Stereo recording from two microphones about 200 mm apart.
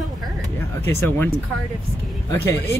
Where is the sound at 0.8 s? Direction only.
10° left (ahead or behind).